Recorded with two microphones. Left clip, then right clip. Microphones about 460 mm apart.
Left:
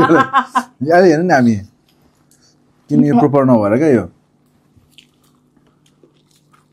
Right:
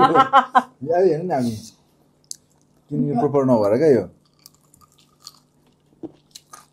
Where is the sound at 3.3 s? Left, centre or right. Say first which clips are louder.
Left 5 dB; centre.